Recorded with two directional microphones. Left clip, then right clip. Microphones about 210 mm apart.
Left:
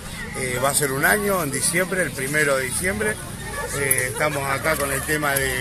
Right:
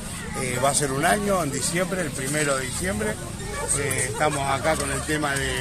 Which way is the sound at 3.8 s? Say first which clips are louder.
Left 2 dB; 45° left (ahead or behind).